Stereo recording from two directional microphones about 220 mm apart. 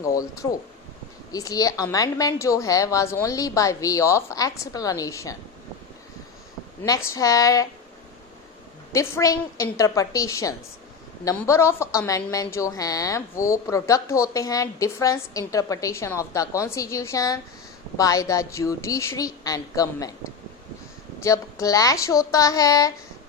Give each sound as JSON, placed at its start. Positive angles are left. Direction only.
{"t": 0.0, "sound": "a woman's voice", "side_deg": 15}
{"t": 6.8, "sound": "a woman's voice", "side_deg": 15}
{"t": 8.9, "sound": "a woman's voice", "side_deg": 15}